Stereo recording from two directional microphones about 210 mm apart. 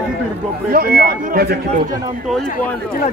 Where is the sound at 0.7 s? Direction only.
45° right (ahead or behind).